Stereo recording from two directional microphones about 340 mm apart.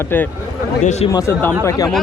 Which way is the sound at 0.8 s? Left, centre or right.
Centre.